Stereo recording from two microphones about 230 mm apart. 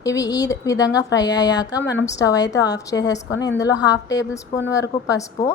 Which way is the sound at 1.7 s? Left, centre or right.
Left.